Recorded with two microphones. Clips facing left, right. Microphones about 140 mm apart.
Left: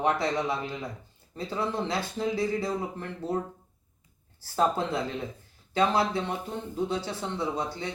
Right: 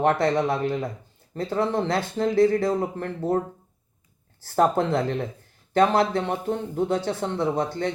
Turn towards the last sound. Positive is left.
turn(degrees=-65)  # may be behind; listen again after turning